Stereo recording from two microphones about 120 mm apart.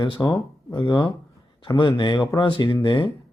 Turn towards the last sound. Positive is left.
turn(degrees=40)  # may be behind; listen again after turning